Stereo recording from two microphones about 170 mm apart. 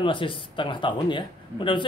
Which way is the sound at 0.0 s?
30° left (ahead or behind).